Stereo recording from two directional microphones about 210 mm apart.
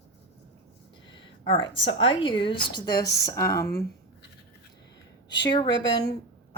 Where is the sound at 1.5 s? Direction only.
20° left (ahead or behind).